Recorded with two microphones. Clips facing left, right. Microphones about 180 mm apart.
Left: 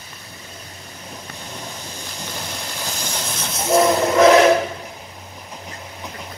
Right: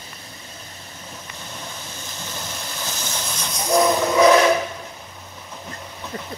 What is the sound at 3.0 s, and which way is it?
Train, 10° left (ahead or behind).